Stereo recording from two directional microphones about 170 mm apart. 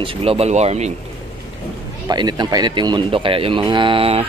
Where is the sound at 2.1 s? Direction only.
25° right (ahead or behind).